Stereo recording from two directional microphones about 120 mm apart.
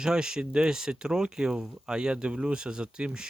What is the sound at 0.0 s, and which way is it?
Speech, 5° right (ahead or behind).